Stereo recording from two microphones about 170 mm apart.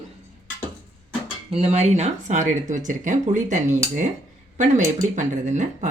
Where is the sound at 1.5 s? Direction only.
40° right (ahead or behind).